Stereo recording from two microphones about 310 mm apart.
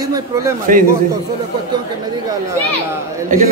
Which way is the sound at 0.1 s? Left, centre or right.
Centre.